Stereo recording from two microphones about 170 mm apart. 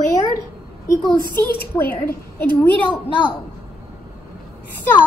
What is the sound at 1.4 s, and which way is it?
Speech, 65° left (ahead or behind).